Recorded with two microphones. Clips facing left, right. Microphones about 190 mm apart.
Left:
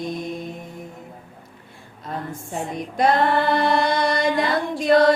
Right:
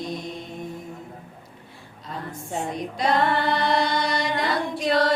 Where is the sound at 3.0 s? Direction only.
50° left (ahead or behind).